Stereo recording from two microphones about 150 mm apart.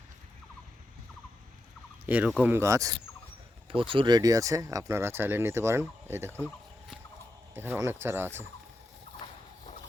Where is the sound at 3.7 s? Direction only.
35° right (ahead or behind); by 6.4 s 15° right (ahead or behind).